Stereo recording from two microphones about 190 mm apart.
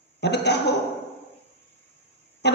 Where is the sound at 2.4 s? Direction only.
60° left (ahead or behind).